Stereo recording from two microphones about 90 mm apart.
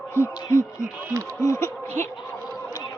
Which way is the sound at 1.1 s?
30° right (ahead or behind).